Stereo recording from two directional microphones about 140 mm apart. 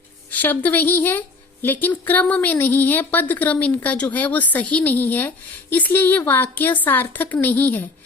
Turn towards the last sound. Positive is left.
turn(degrees=15)  # may be behind; listen again after turning